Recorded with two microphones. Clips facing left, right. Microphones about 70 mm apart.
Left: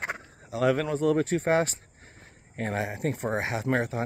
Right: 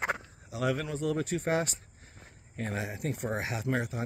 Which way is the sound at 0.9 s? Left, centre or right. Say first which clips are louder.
Left 7 dB; left.